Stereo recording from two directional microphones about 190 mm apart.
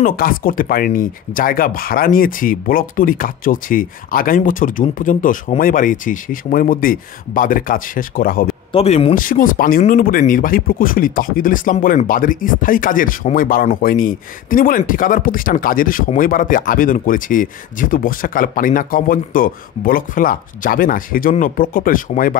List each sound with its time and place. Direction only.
0.0 s speech: 50° left (ahead or behind)
8.7 s speech: 30° left (ahead or behind)